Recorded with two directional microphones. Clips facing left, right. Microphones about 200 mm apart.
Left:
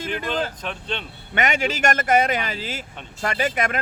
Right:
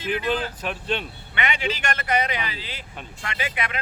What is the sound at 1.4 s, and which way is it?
Speech, 45° left (ahead or behind).